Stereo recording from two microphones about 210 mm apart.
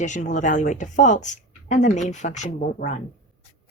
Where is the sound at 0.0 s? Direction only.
35° left (ahead or behind).